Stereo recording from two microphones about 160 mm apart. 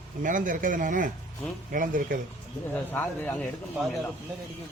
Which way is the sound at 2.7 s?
10° left (ahead or behind).